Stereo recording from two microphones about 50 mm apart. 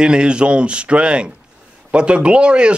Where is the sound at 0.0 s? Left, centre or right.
Centre.